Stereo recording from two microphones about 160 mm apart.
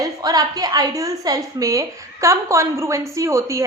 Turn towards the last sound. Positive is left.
turn(degrees=-20)  # may be behind; listen again after turning